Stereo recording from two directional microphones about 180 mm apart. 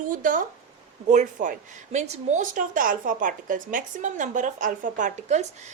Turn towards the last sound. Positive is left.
turn(degrees=-40)  # may be behind; listen again after turning